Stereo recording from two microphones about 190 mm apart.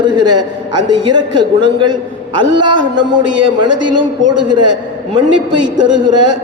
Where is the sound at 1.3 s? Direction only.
25° right (ahead or behind).